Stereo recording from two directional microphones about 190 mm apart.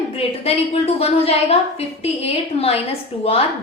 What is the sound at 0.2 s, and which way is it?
A woman's voice, 30° left (ahead or behind).